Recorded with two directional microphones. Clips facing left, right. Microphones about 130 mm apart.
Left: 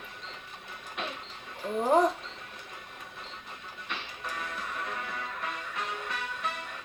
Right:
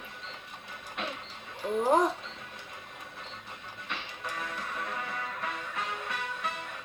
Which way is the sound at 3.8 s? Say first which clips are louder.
Even; 10° right (ahead or behind).